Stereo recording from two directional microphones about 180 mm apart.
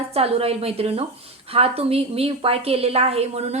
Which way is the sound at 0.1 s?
35° right (ahead or behind).